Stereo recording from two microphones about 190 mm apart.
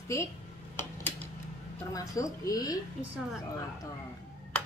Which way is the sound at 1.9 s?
15° left (ahead or behind).